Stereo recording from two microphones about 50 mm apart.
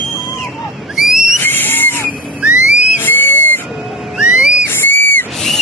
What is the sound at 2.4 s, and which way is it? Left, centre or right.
Whistle, right.